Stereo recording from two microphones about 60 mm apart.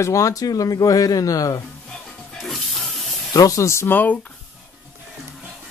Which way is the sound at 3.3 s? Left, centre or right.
Left.